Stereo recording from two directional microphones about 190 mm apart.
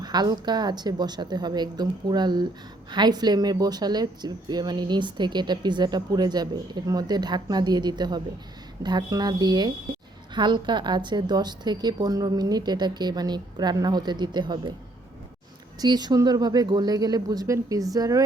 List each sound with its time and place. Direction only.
0.0 s speech: 20° right (ahead or behind)
15.8 s speech: 20° right (ahead or behind)